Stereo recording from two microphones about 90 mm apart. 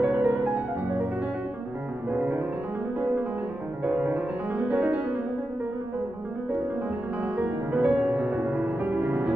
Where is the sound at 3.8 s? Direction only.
15° right (ahead or behind).